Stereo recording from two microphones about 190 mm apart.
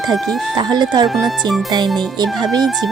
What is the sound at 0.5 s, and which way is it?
Speech, 20° right (ahead or behind).